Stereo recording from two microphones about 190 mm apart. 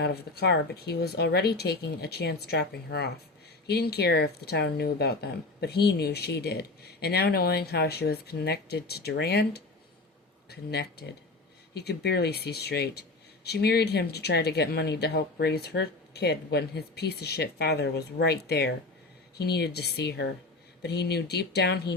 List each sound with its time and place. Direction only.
0.0 s speech: 60° left (ahead or behind)